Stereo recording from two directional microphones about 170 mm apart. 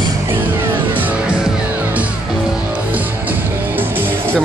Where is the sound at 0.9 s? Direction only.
10° right (ahead or behind).